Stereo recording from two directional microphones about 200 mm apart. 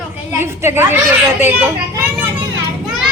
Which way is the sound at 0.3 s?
10° right (ahead or behind).